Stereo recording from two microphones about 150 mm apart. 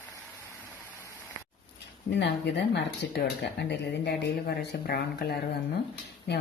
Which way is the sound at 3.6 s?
90° left.